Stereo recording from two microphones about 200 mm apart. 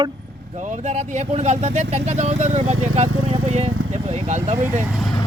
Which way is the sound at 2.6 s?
90° right.